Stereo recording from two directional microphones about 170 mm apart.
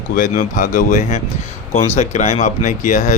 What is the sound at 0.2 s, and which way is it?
Speech, 50° left (ahead or behind).